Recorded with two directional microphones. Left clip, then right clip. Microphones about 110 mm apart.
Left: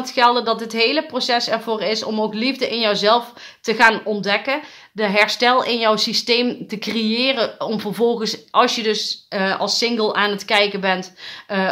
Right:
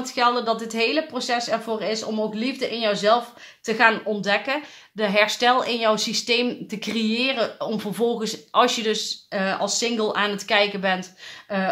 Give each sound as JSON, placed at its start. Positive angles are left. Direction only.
{"t": 0.0, "sound": "a woman's voice", "side_deg": 30}
{"t": 11.5, "sound": "speech", "side_deg": 40}